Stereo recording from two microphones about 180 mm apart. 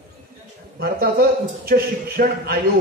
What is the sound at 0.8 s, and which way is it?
A man's voice, 60° right (ahead or behind).